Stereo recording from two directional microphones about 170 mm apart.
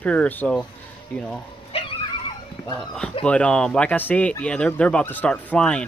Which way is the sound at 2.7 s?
5° left (ahead or behind).